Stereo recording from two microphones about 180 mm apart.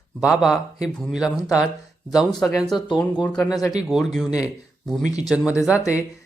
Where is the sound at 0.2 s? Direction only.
Centre (ahead or behind).